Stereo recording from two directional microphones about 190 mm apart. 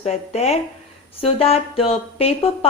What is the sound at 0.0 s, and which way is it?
Speech, 35° left (ahead or behind).